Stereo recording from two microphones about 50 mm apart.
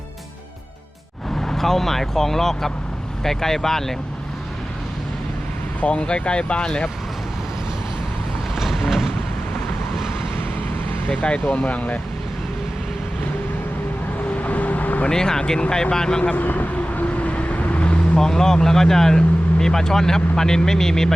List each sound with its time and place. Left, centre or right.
1.4 s speech: centre
5.8 s speech: left
8.5 s vehicle: centre
11.1 s speech: left
14.4 s vehicle: left
15.1 s speech: centre
16.3 s vehicle: left
18.2 s speech: centre